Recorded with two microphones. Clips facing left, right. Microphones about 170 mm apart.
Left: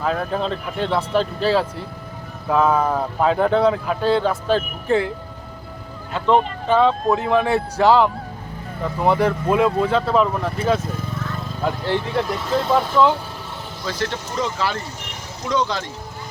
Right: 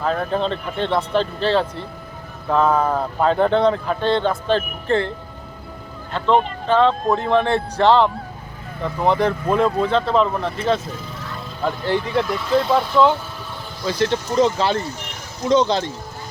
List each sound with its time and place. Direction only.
0.0 s speech: 5° left (ahead or behind)
6.1 s speech: 10° left (ahead or behind)
13.8 s speech: 20° right (ahead or behind)